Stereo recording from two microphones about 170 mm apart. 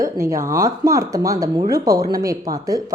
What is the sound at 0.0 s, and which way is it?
A woman's voice, 20° right (ahead or behind).